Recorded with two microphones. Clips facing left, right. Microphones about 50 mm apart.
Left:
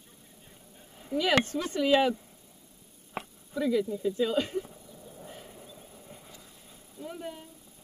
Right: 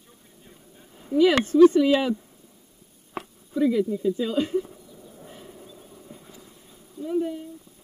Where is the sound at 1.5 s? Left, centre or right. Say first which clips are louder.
Right 10 dB; left.